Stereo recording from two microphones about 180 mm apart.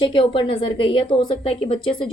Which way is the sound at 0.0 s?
25° left (ahead or behind).